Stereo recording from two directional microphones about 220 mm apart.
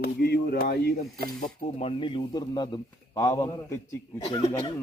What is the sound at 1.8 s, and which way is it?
A man's voice, 25° left (ahead or behind).